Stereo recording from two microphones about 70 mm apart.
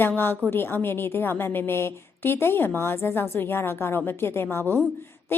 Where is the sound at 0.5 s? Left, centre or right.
Left.